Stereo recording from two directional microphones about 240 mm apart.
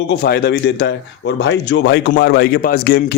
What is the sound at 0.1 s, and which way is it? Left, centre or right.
A man's voice, left.